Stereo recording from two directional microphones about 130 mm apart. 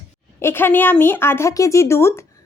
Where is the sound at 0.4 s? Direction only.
15° left (ahead or behind).